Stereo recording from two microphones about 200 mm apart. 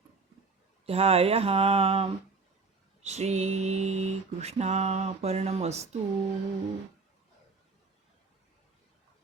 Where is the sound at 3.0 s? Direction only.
35° right (ahead or behind).